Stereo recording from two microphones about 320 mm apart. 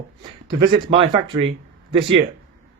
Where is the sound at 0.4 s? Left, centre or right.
Centre.